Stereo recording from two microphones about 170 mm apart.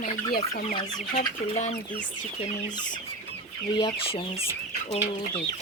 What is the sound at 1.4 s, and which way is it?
Chicken, 35° left (ahead or behind).